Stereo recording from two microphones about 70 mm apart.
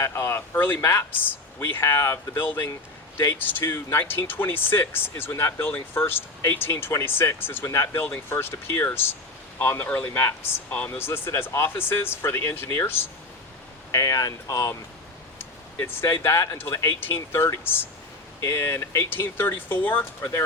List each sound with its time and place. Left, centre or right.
0.0 s speech: left
0.8 s speech: left
1.1 s speech: left
13.9 s speech: left
15.4 s speech: left
18.3 s speech: left
18.6 s speech: left